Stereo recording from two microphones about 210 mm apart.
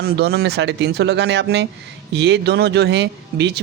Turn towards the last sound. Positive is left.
turn(degrees=-55)  # may be behind; listen again after turning